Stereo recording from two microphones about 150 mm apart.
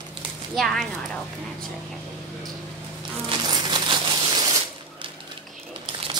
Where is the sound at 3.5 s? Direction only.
30° right (ahead or behind).